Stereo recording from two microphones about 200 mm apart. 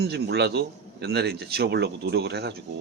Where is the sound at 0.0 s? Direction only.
55° right (ahead or behind).